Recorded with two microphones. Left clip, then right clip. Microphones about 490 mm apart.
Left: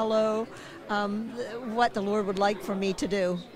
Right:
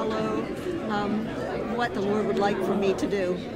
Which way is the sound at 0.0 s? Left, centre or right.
Left.